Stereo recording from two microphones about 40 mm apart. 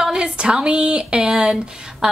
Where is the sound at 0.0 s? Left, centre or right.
Centre.